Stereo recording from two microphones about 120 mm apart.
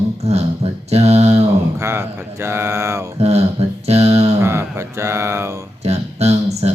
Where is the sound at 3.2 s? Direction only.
60° right (ahead or behind).